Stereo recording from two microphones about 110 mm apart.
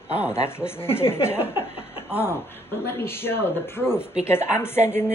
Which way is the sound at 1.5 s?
60° left (ahead or behind).